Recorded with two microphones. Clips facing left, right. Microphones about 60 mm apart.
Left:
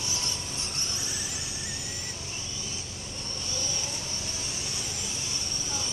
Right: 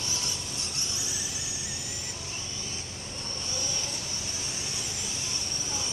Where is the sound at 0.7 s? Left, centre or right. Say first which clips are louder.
Left 1 dB; left.